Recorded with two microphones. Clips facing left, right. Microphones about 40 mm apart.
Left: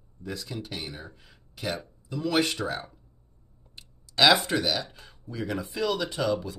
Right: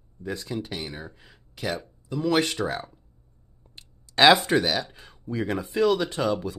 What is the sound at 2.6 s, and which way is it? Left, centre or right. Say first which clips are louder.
Speech: right 3 dB; centre.